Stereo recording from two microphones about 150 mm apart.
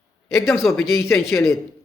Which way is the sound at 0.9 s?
15° left (ahead or behind).